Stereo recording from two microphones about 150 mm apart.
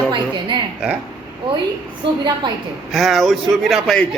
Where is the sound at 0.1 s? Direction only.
35° right (ahead or behind).